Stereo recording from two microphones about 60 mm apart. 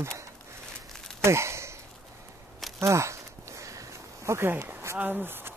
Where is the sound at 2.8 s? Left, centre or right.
Right.